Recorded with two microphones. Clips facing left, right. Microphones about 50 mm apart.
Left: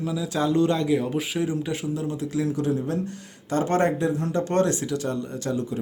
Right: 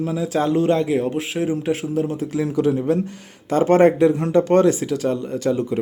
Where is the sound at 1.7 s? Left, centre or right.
Right.